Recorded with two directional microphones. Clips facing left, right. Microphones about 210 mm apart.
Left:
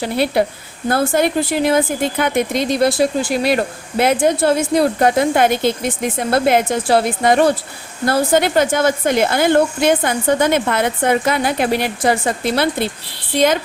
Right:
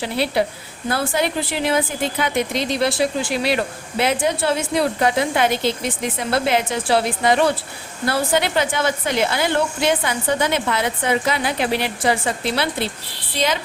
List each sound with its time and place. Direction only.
0.0 s speech: 50° left (ahead or behind)